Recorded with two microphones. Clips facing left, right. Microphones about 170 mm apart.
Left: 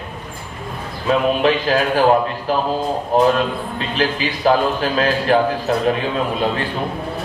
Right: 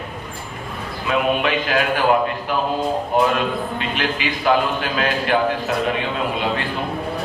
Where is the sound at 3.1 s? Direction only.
35° left (ahead or behind).